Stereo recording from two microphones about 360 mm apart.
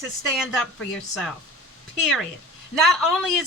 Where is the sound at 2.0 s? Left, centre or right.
Centre.